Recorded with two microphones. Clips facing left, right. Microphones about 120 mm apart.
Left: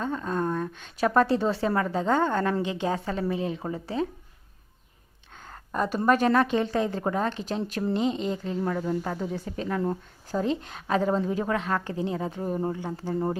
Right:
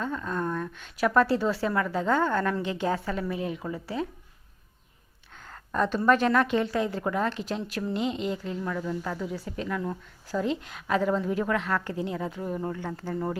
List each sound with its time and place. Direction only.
0.0 s a woman's voice: 25° left (ahead or behind)
5.5 s a sound: 10° left (ahead or behind)
6.1 s a woman's voice: 25° left (ahead or behind)
8.4 s a woman's voice: 35° left (ahead or behind); by 13.1 s 20° left (ahead or behind)